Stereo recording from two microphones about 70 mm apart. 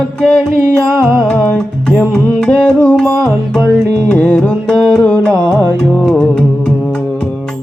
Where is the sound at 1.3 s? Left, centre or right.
Left.